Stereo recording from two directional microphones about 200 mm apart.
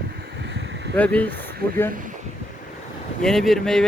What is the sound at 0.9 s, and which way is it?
Speech, 5° left (ahead or behind).